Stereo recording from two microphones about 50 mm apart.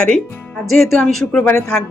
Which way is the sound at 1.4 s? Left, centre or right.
Centre.